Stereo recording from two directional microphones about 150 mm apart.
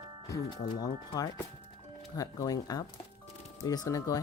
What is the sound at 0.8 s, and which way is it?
Speech, 25° left (ahead or behind).